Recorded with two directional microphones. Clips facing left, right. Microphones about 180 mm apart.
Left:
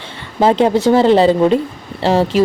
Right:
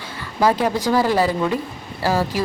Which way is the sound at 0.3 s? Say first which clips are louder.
Left 6 dB; 25° left (ahead or behind).